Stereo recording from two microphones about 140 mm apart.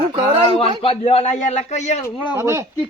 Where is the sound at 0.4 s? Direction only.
40° left (ahead or behind).